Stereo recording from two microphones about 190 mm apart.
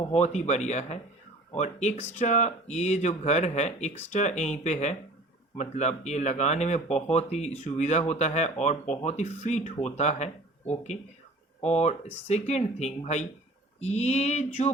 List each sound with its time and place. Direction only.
0.0 s speech: 35° left (ahead or behind)
11.6 s speech: 35° left (ahead or behind)